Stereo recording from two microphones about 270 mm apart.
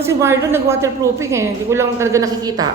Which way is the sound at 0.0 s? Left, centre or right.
Centre.